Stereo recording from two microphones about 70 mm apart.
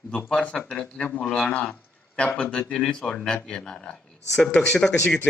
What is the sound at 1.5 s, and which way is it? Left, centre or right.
A man's voice, left.